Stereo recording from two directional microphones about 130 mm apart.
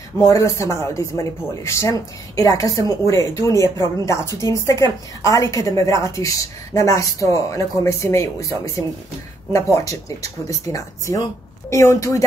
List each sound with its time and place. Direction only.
0.2 s speech: 25° left (ahead or behind)